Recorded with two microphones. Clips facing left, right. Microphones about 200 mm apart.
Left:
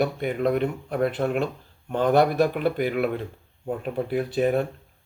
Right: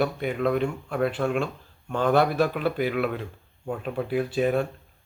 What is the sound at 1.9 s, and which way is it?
Speech, 20° left (ahead or behind).